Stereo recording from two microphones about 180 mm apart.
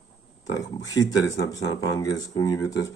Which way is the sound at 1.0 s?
20° left (ahead or behind).